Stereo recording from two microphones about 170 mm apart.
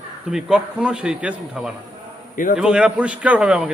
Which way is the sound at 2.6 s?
5° right (ahead or behind).